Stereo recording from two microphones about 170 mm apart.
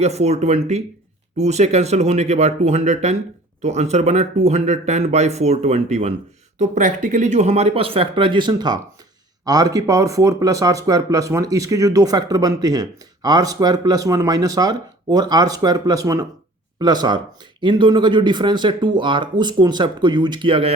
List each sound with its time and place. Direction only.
0.0 s speech: 40° right (ahead or behind)